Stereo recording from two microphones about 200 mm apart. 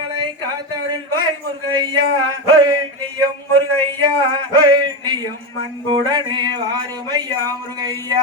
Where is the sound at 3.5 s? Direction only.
20° right (ahead or behind).